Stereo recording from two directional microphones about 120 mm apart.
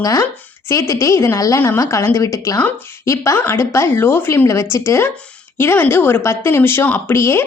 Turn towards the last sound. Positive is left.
turn(degrees=20)  # may be behind; listen again after turning